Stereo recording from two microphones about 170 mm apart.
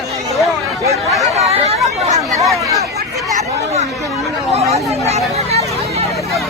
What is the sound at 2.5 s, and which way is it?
Speech, 20° right (ahead or behind).